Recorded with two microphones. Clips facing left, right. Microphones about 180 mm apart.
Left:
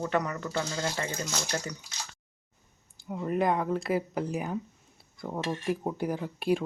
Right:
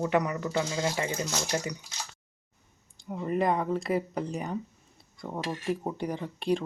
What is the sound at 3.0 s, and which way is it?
Speech, centre (ahead or behind).